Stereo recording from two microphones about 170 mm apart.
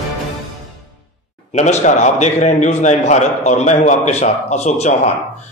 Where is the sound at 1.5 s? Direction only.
45° left (ahead or behind).